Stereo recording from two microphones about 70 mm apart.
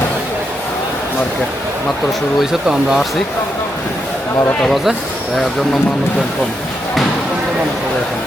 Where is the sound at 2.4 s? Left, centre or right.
Centre.